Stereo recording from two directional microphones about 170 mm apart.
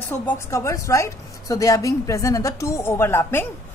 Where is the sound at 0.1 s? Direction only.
15° left (ahead or behind).